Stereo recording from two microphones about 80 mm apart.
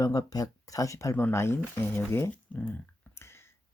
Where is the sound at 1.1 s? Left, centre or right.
Left.